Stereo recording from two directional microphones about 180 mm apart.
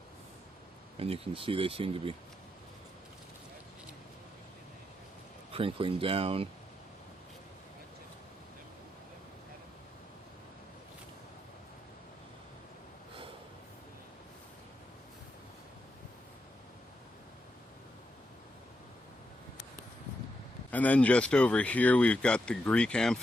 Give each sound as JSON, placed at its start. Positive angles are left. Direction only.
{"t": 0.9, "sound": "speech", "side_deg": -35}
{"t": 5.5, "sound": "speech", "side_deg": -30}
{"t": 20.7, "sound": "speech", "side_deg": 10}